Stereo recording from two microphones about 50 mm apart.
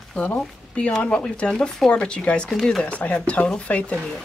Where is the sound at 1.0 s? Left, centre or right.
Centre.